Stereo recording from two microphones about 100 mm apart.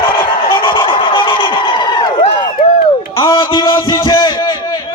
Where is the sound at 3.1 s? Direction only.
35° left (ahead or behind).